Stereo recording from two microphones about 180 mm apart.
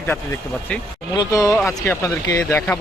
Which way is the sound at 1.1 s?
20° left (ahead or behind).